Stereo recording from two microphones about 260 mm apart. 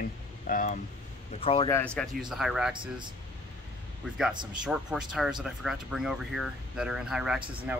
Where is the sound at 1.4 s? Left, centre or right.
Centre.